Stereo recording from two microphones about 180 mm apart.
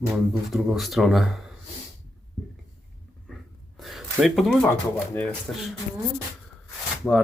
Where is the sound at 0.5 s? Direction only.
Centre (ahead or behind).